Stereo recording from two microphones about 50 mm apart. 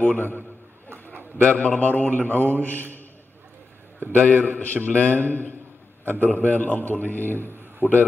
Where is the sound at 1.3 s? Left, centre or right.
Left.